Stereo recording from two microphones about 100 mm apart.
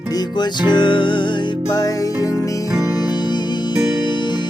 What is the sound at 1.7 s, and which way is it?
Music, 40° left (ahead or behind).